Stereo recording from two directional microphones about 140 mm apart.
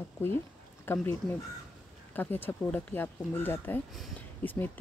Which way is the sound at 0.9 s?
15° left (ahead or behind).